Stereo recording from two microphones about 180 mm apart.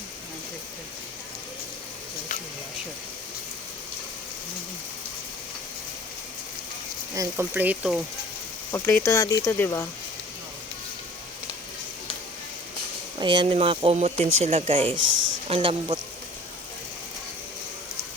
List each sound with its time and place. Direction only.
7.2 s speech: 10° right (ahead or behind)
8.7 s speech: 15° left (ahead or behind)
13.1 s speech: 25° right (ahead or behind)
14.9 s a man's voice: 90° right
15.4 s speech: 30° right (ahead or behind)